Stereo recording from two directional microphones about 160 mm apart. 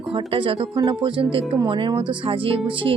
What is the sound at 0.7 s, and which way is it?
Speech, 25° right (ahead or behind).